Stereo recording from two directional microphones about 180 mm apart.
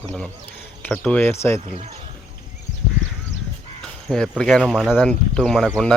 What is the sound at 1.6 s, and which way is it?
Speech, 35° right (ahead or behind).